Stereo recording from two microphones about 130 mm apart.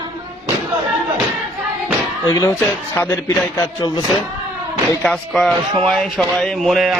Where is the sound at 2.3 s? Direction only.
30° left (ahead or behind).